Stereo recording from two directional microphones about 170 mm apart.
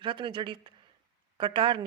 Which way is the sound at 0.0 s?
30° right (ahead or behind).